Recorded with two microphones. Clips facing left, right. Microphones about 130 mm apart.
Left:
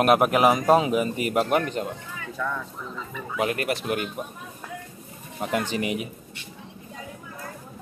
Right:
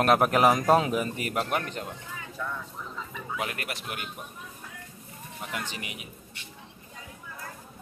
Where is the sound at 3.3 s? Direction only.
30° left (ahead or behind).